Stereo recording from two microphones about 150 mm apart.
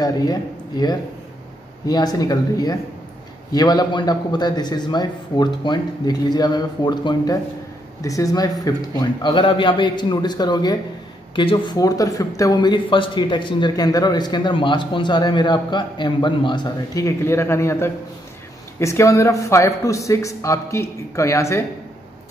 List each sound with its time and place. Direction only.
0.0 s speech: 25° left (ahead or behind)